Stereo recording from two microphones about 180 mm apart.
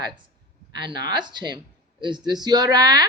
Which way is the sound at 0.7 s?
25° right (ahead or behind).